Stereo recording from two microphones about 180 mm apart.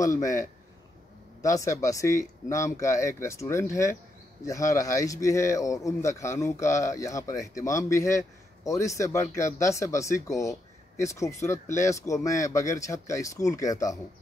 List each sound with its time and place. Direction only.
0.0 s speech: 20° left (ahead or behind)
1.4 s speech: 15° left (ahead or behind)